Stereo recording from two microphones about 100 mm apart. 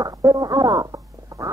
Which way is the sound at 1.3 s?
35° right (ahead or behind).